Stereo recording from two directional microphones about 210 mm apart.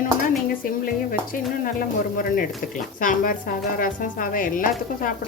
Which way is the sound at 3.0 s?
40° left (ahead or behind).